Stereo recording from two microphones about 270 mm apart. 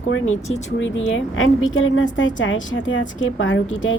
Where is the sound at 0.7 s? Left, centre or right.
Left.